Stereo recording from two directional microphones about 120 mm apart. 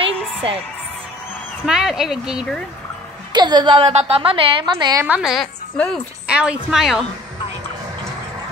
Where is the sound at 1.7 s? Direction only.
5° right (ahead or behind).